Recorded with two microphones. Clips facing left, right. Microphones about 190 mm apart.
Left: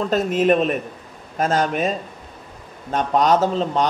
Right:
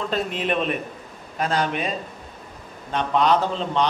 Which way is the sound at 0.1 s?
45° left (ahead or behind).